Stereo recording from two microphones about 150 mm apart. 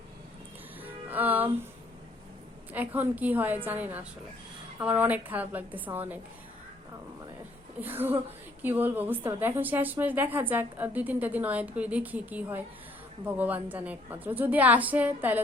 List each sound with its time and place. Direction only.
0.8 s music: 10° right (ahead or behind)
2.7 s a woman's voice: 10° right (ahead or behind)
7.8 s a woman's voice: 15° right (ahead or behind)